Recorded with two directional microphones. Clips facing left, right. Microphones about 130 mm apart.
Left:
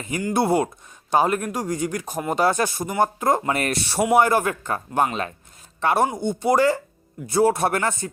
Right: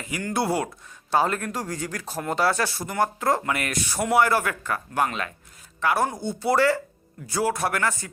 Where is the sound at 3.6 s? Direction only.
30° left (ahead or behind).